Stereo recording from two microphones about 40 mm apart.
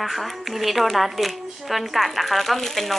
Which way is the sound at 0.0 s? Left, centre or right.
Centre.